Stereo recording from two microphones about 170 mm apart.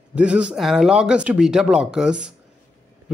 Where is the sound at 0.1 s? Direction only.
5° right (ahead or behind).